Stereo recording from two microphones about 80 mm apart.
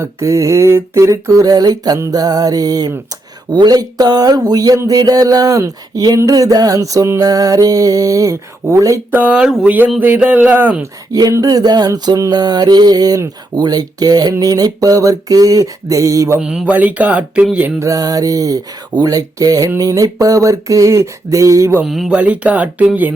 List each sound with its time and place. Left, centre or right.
0.0 s a sound: right
2.0 s speech: right
3.5 s speech: right
9.1 s speech: centre
9.6 s speech: right
11.1 s speech: right
16.4 s speech: centre
16.7 s speech: centre
17.7 s speech: right
21.8 s speech: centre
22.1 s speech: centre